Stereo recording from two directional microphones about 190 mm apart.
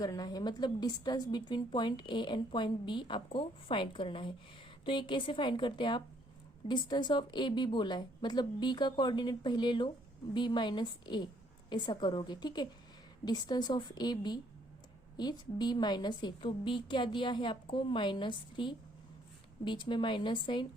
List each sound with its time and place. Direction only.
0.0 s a woman's voice: 20° left (ahead or behind)